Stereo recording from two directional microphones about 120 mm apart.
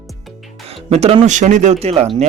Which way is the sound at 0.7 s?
55° right (ahead or behind).